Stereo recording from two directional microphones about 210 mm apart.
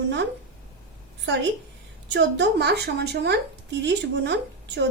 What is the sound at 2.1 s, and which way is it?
A woman's voice, 55° right (ahead or behind).